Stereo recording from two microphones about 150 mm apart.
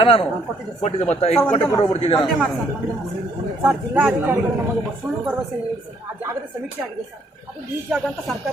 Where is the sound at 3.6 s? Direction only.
15° right (ahead or behind).